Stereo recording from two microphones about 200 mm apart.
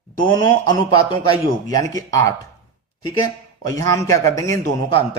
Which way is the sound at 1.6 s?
15° left (ahead or behind).